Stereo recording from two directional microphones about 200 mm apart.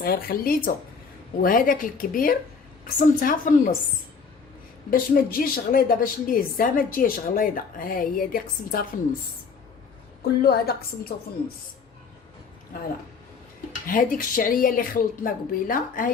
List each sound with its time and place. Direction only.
0.0 s a woman's voice: 50° left (ahead or behind)
4.9 s a woman's voice: 45° left (ahead or behind)
10.4 s a woman's voice: 50° left (ahead or behind)
13.8 s a woman's voice: 45° left (ahead or behind)